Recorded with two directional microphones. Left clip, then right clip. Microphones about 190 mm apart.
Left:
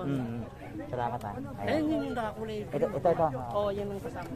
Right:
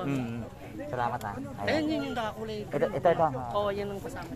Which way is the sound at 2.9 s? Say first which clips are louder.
Right 2 dB; 30° right (ahead or behind).